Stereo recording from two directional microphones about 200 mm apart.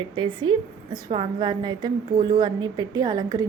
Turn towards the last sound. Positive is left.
turn(degrees=-20)  # may be behind; listen again after turning